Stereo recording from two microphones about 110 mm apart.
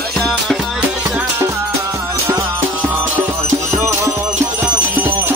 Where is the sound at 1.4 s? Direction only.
30° right (ahead or behind).